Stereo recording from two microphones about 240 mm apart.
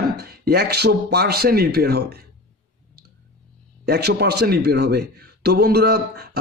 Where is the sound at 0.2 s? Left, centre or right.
Right.